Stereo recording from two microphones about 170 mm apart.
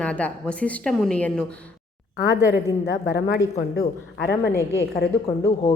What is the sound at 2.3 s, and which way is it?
Speech, 10° right (ahead or behind).